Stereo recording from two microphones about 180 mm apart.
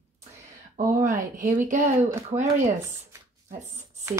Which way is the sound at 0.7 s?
45° right (ahead or behind).